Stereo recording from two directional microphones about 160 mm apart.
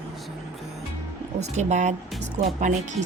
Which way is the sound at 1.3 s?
45° right (ahead or behind).